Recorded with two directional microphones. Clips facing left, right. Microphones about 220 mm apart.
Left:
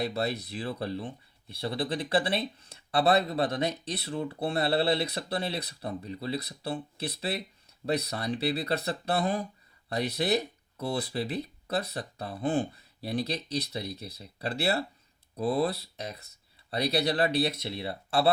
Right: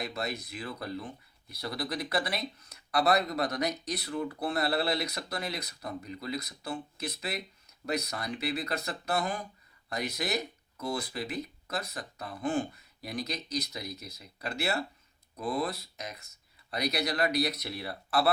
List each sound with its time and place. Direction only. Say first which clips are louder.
0.0 s speech: left 5 dB; 35° left (ahead or behind)